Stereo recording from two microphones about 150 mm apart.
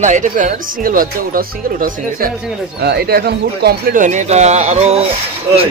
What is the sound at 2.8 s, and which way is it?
Speech, 90° right.